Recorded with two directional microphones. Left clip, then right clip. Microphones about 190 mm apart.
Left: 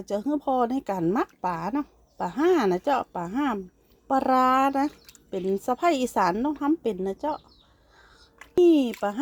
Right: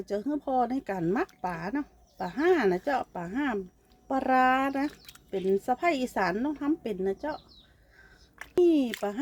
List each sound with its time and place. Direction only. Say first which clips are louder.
0.0 s speech: left 4 dB; 35° left (ahead or behind)
8.6 s speech: left 5 dB; 30° left (ahead or behind)